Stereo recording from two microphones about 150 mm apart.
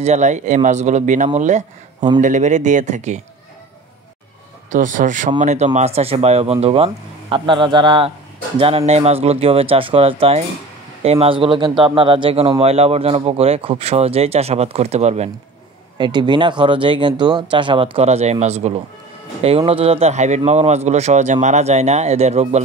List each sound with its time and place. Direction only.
0.0 s speech: 50° right (ahead or behind)
4.6 s speech: 60° right (ahead or behind)
16.0 s speech: 30° right (ahead or behind)
17.9 s speech: 45° right (ahead or behind)